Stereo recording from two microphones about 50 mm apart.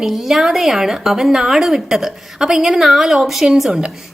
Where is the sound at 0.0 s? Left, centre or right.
Centre.